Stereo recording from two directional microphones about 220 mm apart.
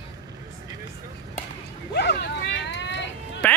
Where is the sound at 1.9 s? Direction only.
50° left (ahead or behind).